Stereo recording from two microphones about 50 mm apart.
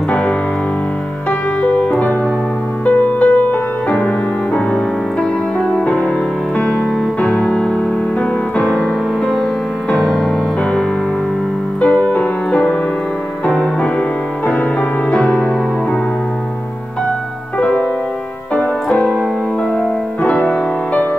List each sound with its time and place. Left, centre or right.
1.6 s music: left
5.9 s music: left
10.0 s music: centre
11.8 s music: left
14.5 s music: left
17.6 s music: left
20.2 s music: left